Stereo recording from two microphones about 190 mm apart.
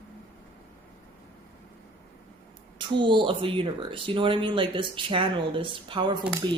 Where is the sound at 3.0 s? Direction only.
25° right (ahead or behind).